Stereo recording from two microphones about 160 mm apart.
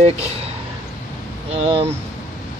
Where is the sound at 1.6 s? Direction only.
35° right (ahead or behind).